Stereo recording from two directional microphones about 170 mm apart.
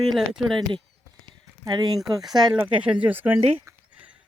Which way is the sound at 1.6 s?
20° right (ahead or behind).